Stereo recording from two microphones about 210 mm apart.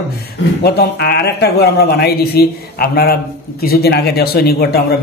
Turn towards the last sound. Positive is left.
turn(degrees=45)  # may be behind; listen again after turning